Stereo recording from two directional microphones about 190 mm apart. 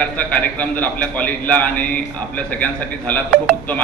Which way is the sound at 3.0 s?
10° left (ahead or behind).